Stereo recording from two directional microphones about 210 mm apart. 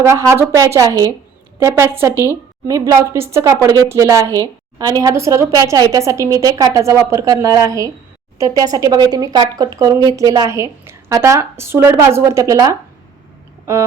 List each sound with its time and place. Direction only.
0.0 s a woman's voice: 15° right (ahead or behind)